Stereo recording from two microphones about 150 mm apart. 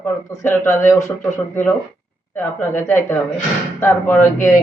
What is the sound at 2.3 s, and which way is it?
Speech, 15° left (ahead or behind).